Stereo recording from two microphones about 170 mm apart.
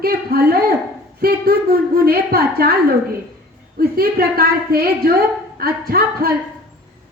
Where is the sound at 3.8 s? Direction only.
60° right (ahead or behind).